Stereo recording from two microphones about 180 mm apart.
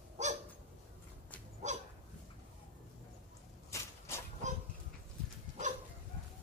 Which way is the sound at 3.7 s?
15° left (ahead or behind).